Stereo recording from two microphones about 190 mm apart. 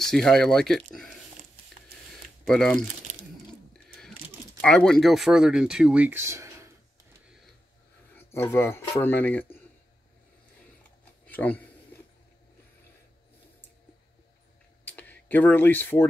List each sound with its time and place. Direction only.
0.0 s speech: centre (ahead or behind)
2.4 s speech: 5° left (ahead or behind)
3.7 s a sound: 5° left (ahead or behind)
4.6 s speech: 5° left (ahead or behind); by 6.7 s 15° right (ahead or behind)
8.3 s speech: 10° left (ahead or behind)
11.2 s a sound: 10° left (ahead or behind)
14.9 s speech: 10° left (ahead or behind)